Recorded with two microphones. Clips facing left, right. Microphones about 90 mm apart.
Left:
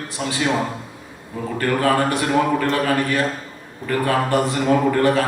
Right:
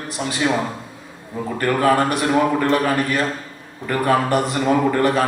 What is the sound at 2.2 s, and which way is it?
A man's voice, 20° right (ahead or behind).